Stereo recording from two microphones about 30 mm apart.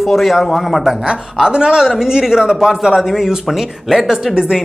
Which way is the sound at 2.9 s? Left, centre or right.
Centre.